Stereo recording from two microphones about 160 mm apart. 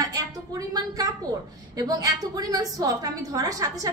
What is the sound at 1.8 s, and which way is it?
A woman's voice, 25° right (ahead or behind).